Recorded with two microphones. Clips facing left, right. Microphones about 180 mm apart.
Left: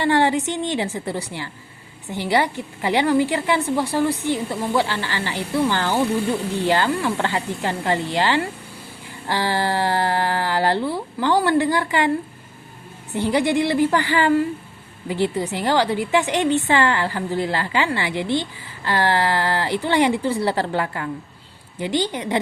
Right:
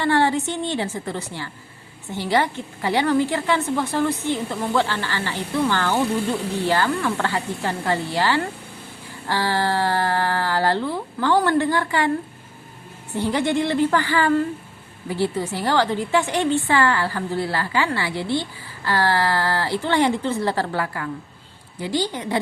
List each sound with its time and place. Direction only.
0.0 s a woman's voice: 15° left (ahead or behind)
13.1 s a woman's voice: 15° left (ahead or behind)